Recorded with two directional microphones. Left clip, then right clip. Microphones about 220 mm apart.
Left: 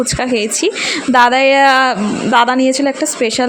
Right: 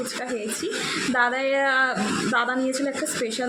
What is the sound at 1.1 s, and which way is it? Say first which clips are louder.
A woman's voice: left 14 dB; 35° left (ahead or behind).